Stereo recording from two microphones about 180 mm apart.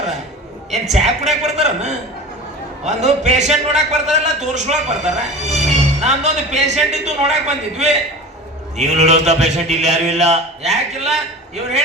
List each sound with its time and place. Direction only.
0.9 s a man's voice: 40° right (ahead or behind)